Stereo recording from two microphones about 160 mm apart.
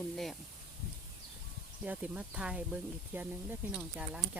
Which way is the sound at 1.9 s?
10° right (ahead or behind).